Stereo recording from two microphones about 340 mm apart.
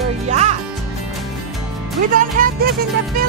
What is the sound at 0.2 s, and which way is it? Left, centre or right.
Music, centre.